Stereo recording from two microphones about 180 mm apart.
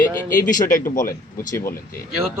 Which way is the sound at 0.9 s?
50° left (ahead or behind).